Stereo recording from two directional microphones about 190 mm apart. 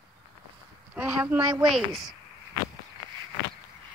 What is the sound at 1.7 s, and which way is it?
Speech, centre (ahead or behind).